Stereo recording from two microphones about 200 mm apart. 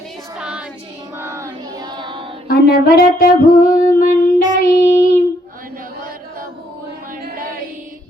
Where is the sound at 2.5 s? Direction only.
50° left (ahead or behind).